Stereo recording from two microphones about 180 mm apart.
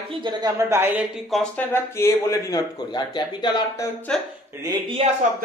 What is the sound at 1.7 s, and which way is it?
A man's voice, 15° left (ahead or behind).